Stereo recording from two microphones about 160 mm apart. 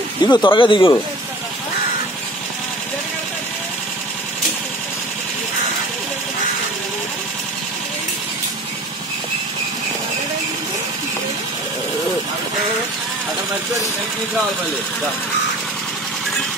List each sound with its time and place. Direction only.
0.2 s speech: 25° left (ahead or behind)